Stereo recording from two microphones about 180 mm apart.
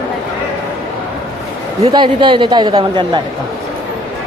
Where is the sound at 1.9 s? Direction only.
25° right (ahead or behind).